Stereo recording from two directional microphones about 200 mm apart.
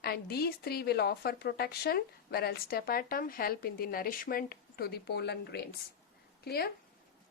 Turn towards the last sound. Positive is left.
turn(degrees=50)  # may be behind; listen again after turning